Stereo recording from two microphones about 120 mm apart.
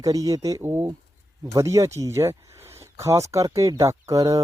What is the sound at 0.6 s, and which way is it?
Speech, 20° right (ahead or behind).